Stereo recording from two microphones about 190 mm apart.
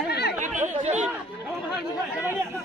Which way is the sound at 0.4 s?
40° right (ahead or behind).